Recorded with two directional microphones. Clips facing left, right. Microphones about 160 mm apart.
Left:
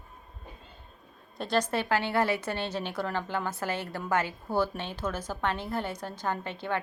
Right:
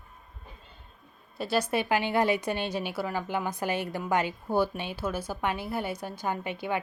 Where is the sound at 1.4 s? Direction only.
10° right (ahead or behind).